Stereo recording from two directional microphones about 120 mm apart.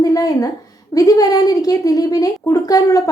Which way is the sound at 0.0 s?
30° left (ahead or behind).